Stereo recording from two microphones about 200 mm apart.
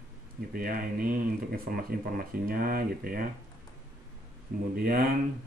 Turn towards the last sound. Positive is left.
turn(degrees=-50)  # may be behind; listen again after turning